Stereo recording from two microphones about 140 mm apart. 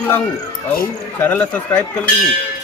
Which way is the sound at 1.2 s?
10° left (ahead or behind).